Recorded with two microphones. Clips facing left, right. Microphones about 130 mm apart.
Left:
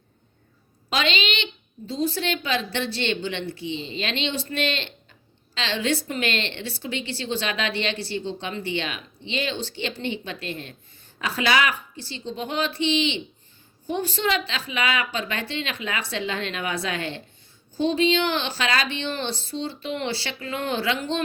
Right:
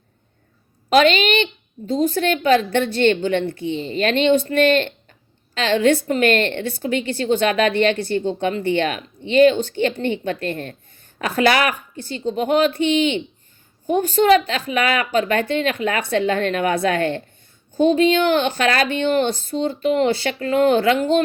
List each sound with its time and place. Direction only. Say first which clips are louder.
0.9 s a woman's voice: right 10 dB; 50° right (ahead or behind)